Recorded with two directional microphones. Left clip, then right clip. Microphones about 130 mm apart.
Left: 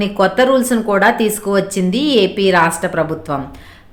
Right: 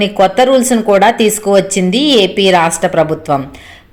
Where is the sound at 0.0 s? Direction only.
20° right (ahead or behind).